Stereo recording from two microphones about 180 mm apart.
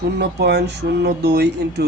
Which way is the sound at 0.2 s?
65° right (ahead or behind).